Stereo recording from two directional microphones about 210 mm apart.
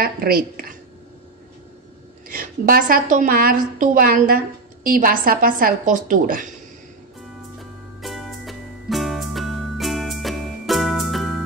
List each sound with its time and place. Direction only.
0.0 s a sound: 45° right (ahead or behind)
2.2 s a woman's voice: 40° right (ahead or behind)
8.0 s music: centre (ahead or behind)